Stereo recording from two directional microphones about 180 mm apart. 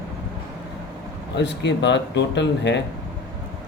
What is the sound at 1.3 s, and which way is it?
Speech, 75° left (ahead or behind).